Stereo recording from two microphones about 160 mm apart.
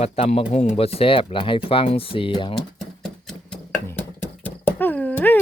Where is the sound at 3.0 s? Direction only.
5° left (ahead or behind).